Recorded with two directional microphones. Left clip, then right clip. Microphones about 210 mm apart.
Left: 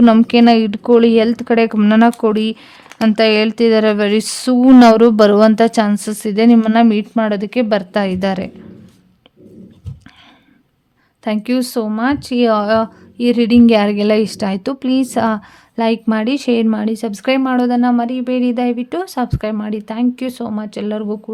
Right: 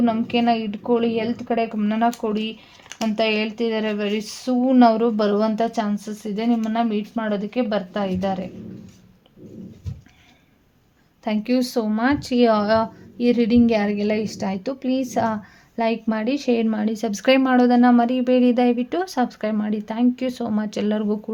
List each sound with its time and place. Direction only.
0.0 s speech: 45° left (ahead or behind)
11.2 s speech: 30° left (ahead or behind); by 21.3 s 10° left (ahead or behind)